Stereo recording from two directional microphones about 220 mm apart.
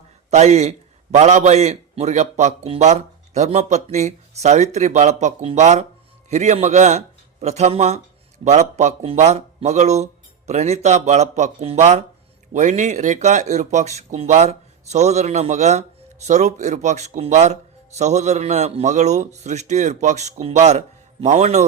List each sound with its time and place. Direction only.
0.3 s speech: 30° right (ahead or behind)